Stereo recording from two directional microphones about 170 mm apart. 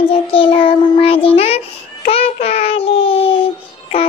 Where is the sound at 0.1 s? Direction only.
35° left (ahead or behind).